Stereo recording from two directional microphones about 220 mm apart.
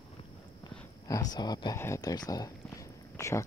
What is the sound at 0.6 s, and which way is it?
Speech, 15° left (ahead or behind).